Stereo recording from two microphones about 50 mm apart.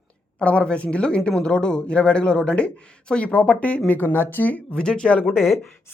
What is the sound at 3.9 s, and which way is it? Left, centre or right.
Speech, left.